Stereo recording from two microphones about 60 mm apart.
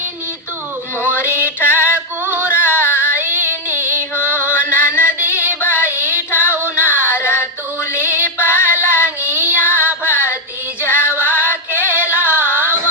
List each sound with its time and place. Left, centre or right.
1.0 s music: left
3.2 s female singing: left
3.7 s female singing: right
4.1 s music: left
6.5 s music: right
7.0 s a sound: left
8.2 s female singing: left
9.0 s child singing: right
9.6 s music: left